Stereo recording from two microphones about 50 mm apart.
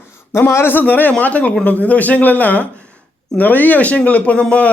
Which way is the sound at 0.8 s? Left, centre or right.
Left.